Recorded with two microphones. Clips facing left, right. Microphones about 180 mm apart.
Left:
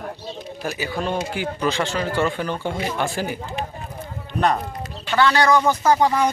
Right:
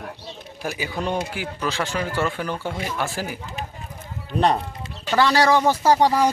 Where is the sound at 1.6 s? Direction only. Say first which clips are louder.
Left 2 dB; centre (ahead or behind).